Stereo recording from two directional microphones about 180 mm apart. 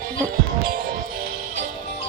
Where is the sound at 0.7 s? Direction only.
55° right (ahead or behind).